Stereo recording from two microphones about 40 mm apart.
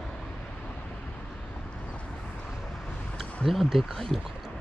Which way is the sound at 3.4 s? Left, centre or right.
Centre.